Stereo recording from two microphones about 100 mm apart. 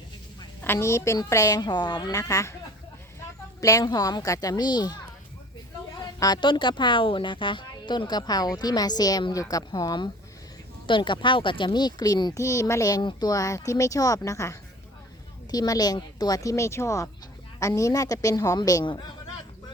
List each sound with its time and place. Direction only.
0.6 s a woman's voice: 25° left (ahead or behind)
3.6 s speech: 35° left (ahead or behind)
6.1 s a woman's voice: 40° left (ahead or behind)
10.8 s a woman's voice: 55° left (ahead or behind); by 13.0 s 35° left (ahead or behind)
13.0 s speech: 45° left (ahead or behind)
15.5 s speech: 40° left (ahead or behind)